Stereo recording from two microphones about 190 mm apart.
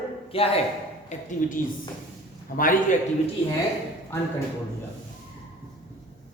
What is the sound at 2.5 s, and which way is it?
Speech, 45° left (ahead or behind).